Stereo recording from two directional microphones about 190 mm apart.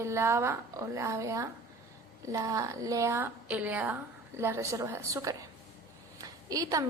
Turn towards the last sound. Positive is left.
turn(degrees=-20)  # may be behind; listen again after turning